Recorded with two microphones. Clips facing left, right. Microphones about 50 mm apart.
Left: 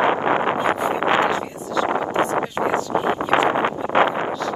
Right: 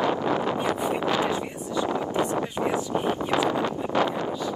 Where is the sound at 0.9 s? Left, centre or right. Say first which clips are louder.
Left 7 dB; left.